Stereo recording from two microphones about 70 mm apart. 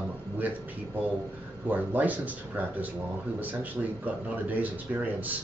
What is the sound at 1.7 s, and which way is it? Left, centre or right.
Speech, right.